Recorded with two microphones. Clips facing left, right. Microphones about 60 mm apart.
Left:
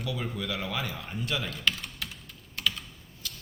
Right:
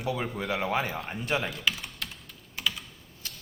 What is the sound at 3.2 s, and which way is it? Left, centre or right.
Typewriter, right.